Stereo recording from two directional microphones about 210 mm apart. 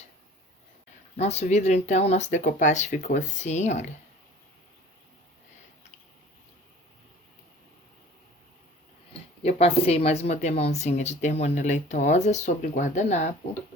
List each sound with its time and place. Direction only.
1.1 s speech: 30° left (ahead or behind)
9.4 s speech: 30° left (ahead or behind)